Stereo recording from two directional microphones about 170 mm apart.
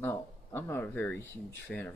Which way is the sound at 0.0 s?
15° left (ahead or behind).